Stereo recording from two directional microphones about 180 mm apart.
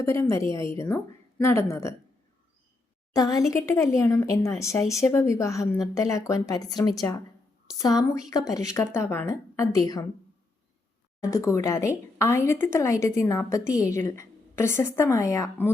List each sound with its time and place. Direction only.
0.0 s speech: 15° left (ahead or behind)
3.2 s a woman's voice: 20° left (ahead or behind)
11.2 s speech: 15° left (ahead or behind)